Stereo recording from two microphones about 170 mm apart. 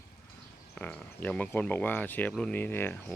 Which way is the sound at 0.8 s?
10° left (ahead or behind).